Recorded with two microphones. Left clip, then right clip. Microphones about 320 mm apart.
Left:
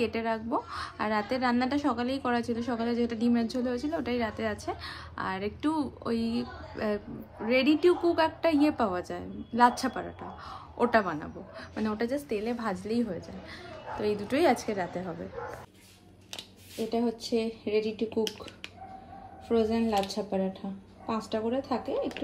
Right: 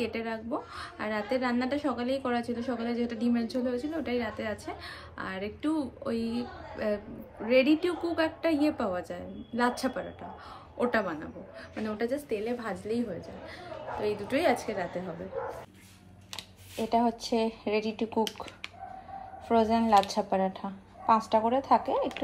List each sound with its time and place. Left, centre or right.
0.0 s a woman's voice: centre
16.7 s a woman's voice: centre
19.4 s a woman's voice: centre